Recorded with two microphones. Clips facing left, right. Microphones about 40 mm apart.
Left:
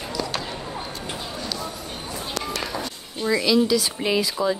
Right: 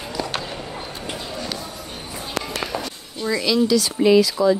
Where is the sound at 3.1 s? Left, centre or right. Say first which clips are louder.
Even; centre.